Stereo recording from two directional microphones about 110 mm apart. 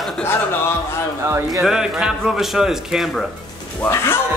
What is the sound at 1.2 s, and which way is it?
Speech, 25° right (ahead or behind).